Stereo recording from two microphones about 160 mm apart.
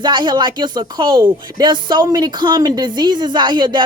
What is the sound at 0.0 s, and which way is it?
Speech, 30° right (ahead or behind).